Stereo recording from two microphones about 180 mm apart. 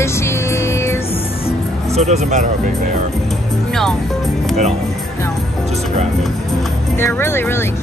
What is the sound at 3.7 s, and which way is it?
Speech, centre (ahead or behind).